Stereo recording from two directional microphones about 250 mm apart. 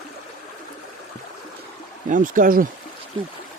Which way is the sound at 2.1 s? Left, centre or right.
Right.